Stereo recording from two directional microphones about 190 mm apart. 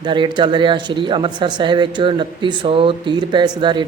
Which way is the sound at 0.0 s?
25° right (ahead or behind).